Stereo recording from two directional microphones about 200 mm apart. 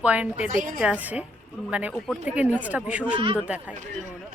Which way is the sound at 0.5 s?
40° right (ahead or behind).